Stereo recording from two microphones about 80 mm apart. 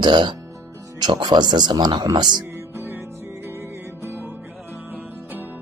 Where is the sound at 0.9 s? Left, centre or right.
Right.